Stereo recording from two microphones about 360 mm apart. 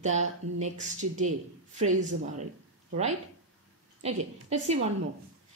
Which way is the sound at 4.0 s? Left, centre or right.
Centre.